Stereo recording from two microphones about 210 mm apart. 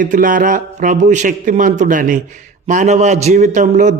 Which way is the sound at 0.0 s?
40° right (ahead or behind).